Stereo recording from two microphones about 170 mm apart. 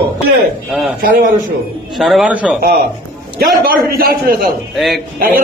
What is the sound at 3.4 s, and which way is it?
A man's voice, 60° right (ahead or behind).